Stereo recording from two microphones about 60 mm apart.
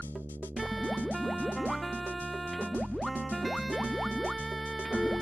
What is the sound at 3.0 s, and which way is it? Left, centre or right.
Music, centre.